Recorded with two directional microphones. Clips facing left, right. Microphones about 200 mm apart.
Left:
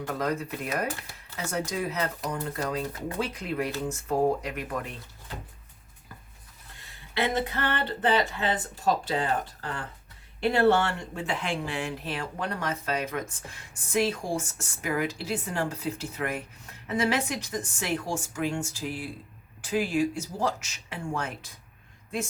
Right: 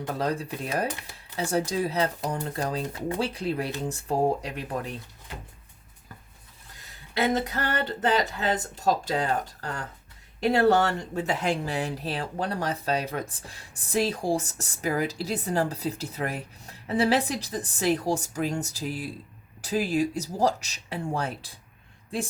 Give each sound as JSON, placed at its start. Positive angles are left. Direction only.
{"t": 0.1, "sound": "speech", "side_deg": -30}
{"t": 7.1, "sound": "speech", "side_deg": -40}